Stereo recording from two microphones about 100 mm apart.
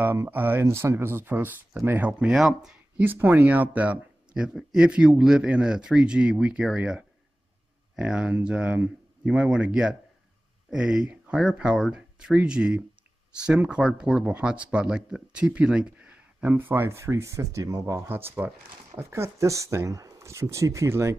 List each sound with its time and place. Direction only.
0.0 s speech: 20° right (ahead or behind); by 2.8 s 5° right (ahead or behind)
3.0 s speech: 20° right (ahead or behind)